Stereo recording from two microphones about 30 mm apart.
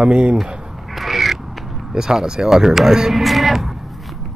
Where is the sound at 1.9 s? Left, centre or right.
Right.